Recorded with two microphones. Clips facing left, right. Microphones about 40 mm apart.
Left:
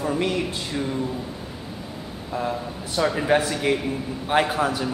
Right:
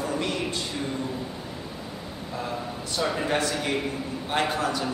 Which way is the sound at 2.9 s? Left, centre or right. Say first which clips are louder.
Left 6 dB; centre.